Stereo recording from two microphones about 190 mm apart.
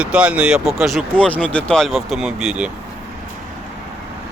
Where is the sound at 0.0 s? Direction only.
5° right (ahead or behind).